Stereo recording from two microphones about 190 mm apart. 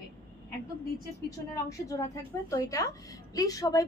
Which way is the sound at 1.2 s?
15° left (ahead or behind).